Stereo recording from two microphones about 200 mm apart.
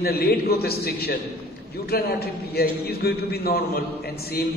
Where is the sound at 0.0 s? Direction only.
50° left (ahead or behind).